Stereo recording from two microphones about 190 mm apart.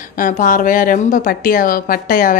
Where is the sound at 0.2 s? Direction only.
45° left (ahead or behind).